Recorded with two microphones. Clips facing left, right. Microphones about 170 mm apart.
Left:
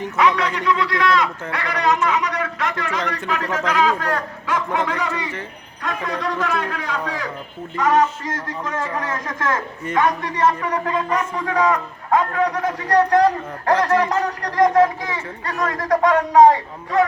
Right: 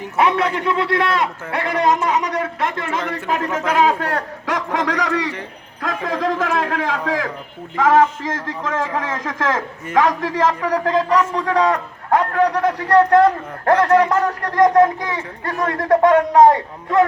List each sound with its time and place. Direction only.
0.2 s a man's voice: 55° right (ahead or behind)
3.7 s a man's voice: 60° right (ahead or behind)
15.7 s a man's voice: 60° right (ahead or behind)